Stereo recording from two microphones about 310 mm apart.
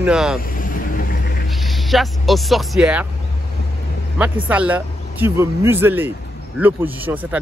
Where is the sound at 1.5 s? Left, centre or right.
Centre.